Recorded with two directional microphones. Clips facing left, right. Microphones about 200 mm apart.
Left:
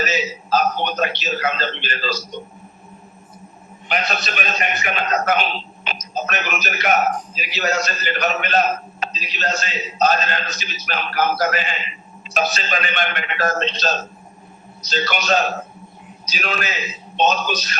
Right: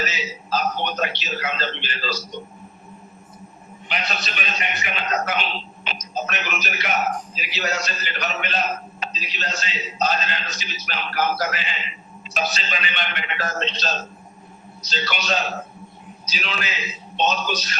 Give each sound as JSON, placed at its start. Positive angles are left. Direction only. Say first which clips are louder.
{"t": 0.0, "sound": "a man's voice", "louder": "left 6 dB", "side_deg": 45}
{"t": 3.8, "sound": "a man's voice", "louder": "left 5 dB", "side_deg": 45}